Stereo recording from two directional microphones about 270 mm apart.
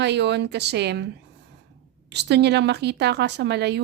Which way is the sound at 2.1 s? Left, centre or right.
Right.